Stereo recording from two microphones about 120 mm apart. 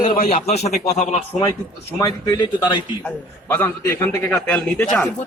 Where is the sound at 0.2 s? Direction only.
60° left (ahead or behind).